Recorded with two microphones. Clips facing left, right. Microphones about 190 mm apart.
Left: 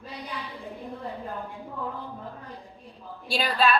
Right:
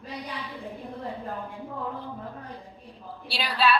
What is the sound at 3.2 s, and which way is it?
Speech, 45° left (ahead or behind).